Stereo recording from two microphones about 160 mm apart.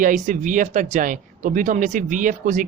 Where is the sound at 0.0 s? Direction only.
55° right (ahead or behind).